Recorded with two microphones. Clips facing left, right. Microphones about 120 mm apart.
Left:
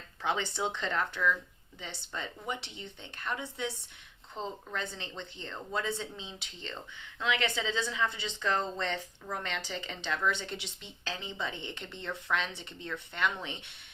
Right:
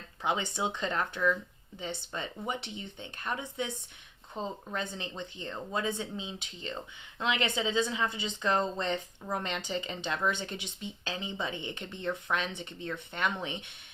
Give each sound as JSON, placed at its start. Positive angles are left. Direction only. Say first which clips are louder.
{"t": 0.2, "sound": "a woman's voice", "louder": "right 1 dB", "side_deg": -15}